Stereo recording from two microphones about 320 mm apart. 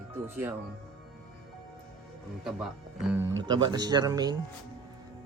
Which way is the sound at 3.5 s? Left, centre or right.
Centre.